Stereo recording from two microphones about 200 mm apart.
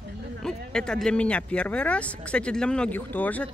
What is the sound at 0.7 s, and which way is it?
Speech, 5° left (ahead or behind).